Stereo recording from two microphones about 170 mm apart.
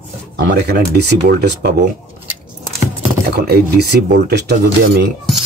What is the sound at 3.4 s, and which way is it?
Speech, 65° right (ahead or behind).